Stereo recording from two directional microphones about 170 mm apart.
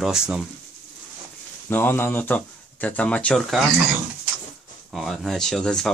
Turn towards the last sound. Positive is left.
turn(degrees=5)  # may be behind; listen again after turning